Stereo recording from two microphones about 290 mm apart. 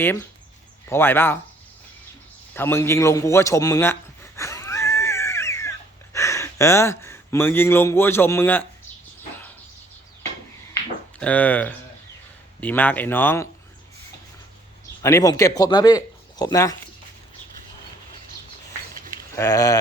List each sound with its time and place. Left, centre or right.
0.0 s speech: centre
2.6 s a sound: centre
6.1 s speech: centre
11.2 s speech: centre
15.0 s speech: centre
18.9 s a sound: right
19.4 s speech: centre